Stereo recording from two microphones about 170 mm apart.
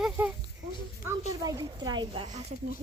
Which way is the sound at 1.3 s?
20° right (ahead or behind).